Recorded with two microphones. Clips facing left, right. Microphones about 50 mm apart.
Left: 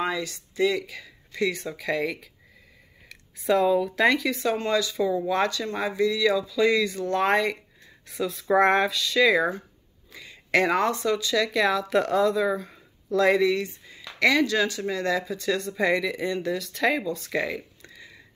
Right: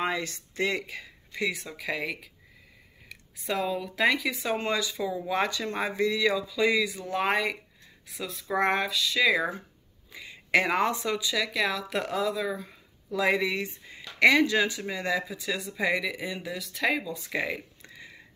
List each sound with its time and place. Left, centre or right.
0.0 s speech: right
1.0 s a sound: centre
1.5 s speech: centre; by 4.9 s right
4.9 s speech: centre
5.3 s speech: centre
6.4 s speech: centre
10.1 s speech: centre
13.1 s speech: centre
17.2 s speech: centre
17.8 s a sound: right